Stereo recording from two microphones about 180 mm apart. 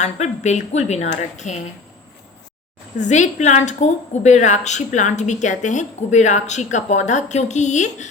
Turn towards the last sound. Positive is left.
turn(degrees=40)  # may be behind; listen again after turning